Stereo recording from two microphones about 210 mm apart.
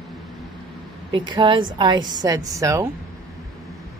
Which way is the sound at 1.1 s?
20° right (ahead or behind).